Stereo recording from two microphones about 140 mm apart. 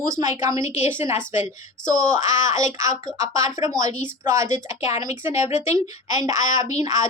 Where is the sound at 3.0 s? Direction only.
25° right (ahead or behind).